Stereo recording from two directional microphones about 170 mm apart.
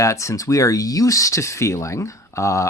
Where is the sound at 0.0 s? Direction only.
20° left (ahead or behind).